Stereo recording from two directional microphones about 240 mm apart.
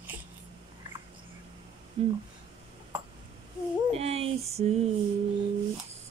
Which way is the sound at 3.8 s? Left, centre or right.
Right.